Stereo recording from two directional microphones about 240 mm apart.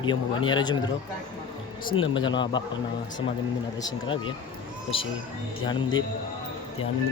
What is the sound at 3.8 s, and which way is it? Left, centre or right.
A man's voice, centre.